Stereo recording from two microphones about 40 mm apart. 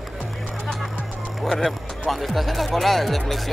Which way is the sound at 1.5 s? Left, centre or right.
Centre.